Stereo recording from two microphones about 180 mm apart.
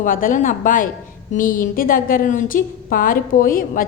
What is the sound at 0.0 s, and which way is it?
A woman's voice, 50° left (ahead or behind).